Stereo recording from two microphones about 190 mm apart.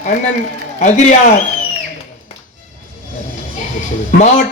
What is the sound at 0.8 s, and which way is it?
Speech, 40° left (ahead or behind).